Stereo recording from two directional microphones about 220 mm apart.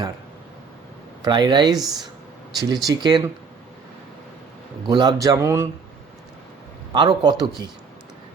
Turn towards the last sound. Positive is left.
turn(degrees=-20)  # may be behind; listen again after turning